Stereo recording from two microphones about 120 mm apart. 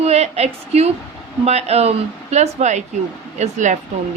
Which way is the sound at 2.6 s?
75° right (ahead or behind).